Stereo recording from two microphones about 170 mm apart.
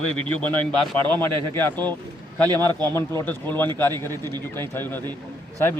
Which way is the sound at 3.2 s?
10° left (ahead or behind).